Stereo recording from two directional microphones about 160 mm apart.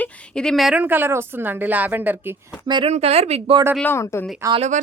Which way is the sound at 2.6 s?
30° right (ahead or behind).